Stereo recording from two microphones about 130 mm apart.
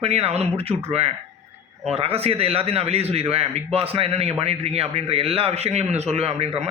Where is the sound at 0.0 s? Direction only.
50° right (ahead or behind).